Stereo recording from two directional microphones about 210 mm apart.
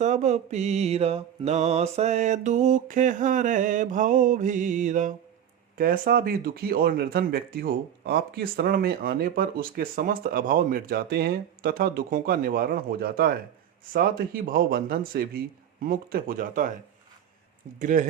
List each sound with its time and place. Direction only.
0.0 s mantra: 35° right (ahead or behind)
5.7 s speech: 45° right (ahead or behind)
17.7 s mantra: 35° right (ahead or behind)